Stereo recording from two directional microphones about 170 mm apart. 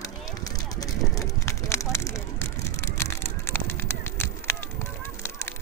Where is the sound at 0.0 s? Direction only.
20° left (ahead or behind).